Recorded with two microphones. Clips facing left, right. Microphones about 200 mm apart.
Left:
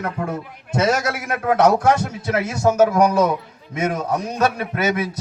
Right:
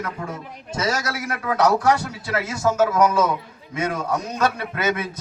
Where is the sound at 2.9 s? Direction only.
40° left (ahead or behind).